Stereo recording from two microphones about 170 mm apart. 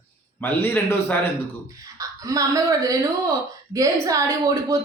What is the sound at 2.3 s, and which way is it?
Speech, 20° right (ahead or behind).